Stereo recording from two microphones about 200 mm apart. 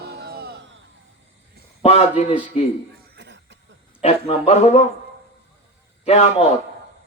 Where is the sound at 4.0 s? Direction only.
30° left (ahead or behind).